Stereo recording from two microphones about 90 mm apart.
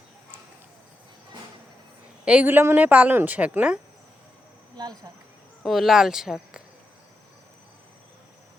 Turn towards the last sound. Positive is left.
turn(degrees=-5)  # may be behind; listen again after turning